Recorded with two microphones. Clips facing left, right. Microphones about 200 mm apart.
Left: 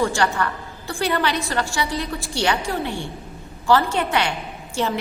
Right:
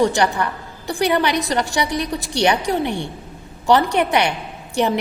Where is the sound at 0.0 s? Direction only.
20° right (ahead or behind).